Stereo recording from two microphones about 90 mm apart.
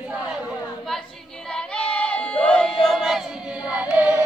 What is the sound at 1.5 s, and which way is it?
Child singing, 10° left (ahead or behind).